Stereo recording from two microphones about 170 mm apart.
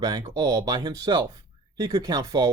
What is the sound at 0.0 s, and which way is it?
Speech, 25° right (ahead or behind).